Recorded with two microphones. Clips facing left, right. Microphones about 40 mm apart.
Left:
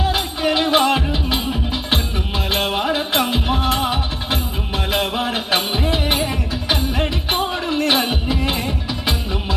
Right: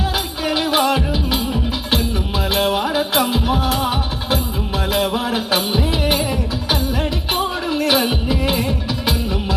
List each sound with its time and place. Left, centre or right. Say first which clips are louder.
0.0 s music: left 2 dB; centre
1.9 s music: right 3 dB; left
7.3 s music: even; centre
8.4 s music: right 2 dB; centre